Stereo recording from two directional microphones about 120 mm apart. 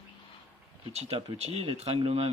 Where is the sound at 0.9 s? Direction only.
60° right (ahead or behind).